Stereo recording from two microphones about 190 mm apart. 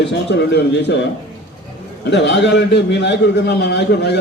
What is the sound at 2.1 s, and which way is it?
A man's voice, 70° left (ahead or behind).